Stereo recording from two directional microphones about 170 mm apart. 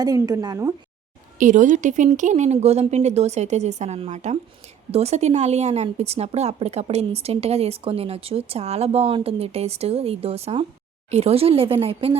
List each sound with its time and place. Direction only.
0.0 s speech: 20° right (ahead or behind)
1.4 s a woman's voice: 50° right (ahead or behind)